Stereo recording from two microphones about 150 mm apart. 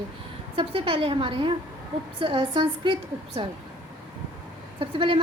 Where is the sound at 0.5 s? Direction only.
35° right (ahead or behind).